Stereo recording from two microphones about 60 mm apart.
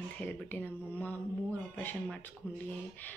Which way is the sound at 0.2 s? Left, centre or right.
Left.